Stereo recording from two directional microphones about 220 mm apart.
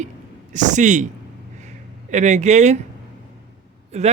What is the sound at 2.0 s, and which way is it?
Speech, 35° right (ahead or behind).